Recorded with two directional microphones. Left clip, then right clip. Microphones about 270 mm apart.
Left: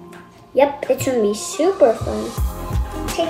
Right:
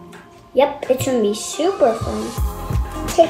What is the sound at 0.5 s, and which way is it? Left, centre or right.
A woman's voice, left.